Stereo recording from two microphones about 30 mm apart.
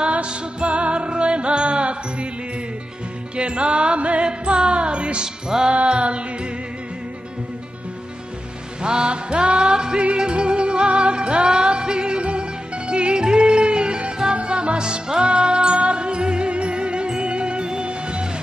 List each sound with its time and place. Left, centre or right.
0.1 s music: right
3.3 s music: right
5.5 s music: centre
5.9 s mantra: right
8.8 s music: right